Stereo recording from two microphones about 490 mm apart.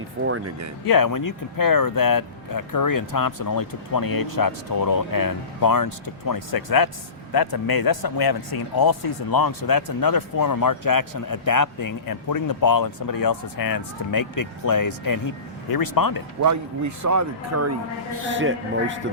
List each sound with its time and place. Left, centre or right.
0.3 s a man's voice: right
0.9 s speech: left
16.4 s a man's voice: right